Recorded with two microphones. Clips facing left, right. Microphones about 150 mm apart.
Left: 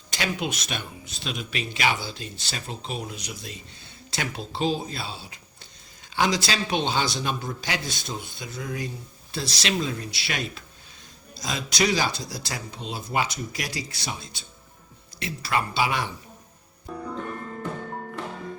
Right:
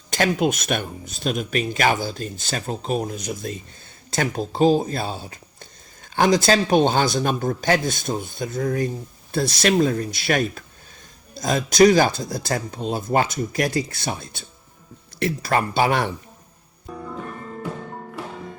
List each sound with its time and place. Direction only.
0.1 s speech: 50° right (ahead or behind)
16.9 s music: centre (ahead or behind)